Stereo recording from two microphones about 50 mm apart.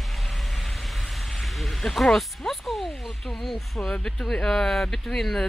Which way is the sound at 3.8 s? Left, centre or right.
Left.